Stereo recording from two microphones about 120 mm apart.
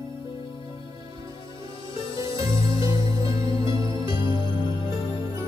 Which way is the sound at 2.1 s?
45° left (ahead or behind).